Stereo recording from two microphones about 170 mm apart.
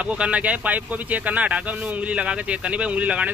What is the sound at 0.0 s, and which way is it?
Speech, 5° right (ahead or behind).